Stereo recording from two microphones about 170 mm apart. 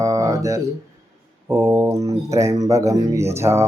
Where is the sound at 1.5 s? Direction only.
15° right (ahead or behind).